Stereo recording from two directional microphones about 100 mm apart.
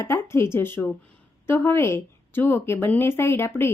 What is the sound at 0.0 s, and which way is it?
Speech, 25° left (ahead or behind).